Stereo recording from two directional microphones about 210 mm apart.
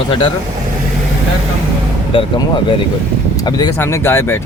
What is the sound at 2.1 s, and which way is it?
Speech, 25° left (ahead or behind).